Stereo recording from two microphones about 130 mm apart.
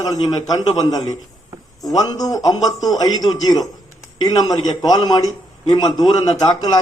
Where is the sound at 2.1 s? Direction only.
30° left (ahead or behind).